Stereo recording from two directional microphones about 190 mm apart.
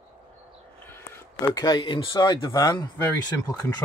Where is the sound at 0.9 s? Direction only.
10° left (ahead or behind).